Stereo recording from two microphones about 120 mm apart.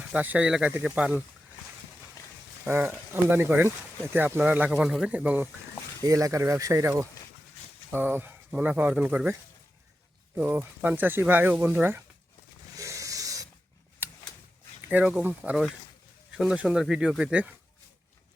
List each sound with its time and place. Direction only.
0.1 s speech: 10° right (ahead or behind)
2.6 s speech: 15° right (ahead or behind)
6.0 s speech: 30° right (ahead or behind)
7.9 s speech: 15° right (ahead or behind)
10.3 s speech: 15° right (ahead or behind)
12.7 s rub: 25° right (ahead or behind)
14.0 s a sound: 20° right (ahead or behind)
14.8 s speech: 15° right (ahead or behind)
16.4 s speech: 5° right (ahead or behind)